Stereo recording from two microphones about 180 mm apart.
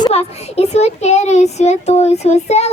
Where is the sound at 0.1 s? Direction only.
35° left (ahead or behind).